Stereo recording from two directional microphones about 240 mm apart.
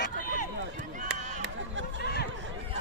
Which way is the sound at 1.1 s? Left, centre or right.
Right.